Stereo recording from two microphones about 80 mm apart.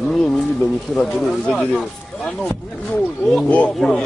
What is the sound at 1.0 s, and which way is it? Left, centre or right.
Speech, centre.